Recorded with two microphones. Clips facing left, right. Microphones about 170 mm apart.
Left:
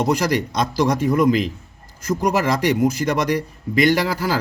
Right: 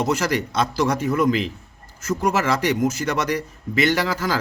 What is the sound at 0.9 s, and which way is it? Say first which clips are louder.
Speech: left 3 dB; 35° left (ahead or behind).